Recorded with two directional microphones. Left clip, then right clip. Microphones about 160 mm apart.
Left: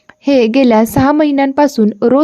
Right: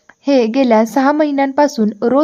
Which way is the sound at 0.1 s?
25° left (ahead or behind).